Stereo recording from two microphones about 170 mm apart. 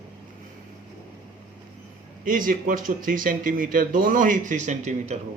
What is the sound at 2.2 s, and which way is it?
Speech, 50° right (ahead or behind).